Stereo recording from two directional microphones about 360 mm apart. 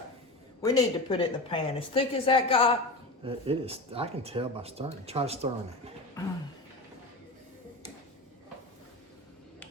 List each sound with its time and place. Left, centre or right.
0.6 s speech: centre
3.2 s speech: centre